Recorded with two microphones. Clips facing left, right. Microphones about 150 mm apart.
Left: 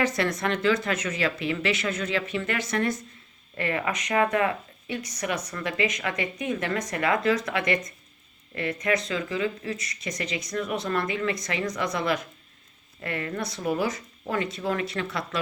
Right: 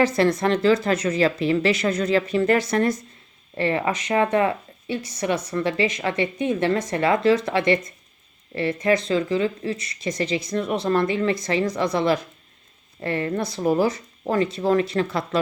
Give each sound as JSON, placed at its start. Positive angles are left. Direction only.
{"t": 0.0, "sound": "speech", "side_deg": -30}